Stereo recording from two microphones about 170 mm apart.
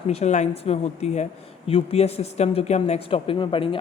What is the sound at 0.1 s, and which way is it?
Speech, 40° left (ahead or behind).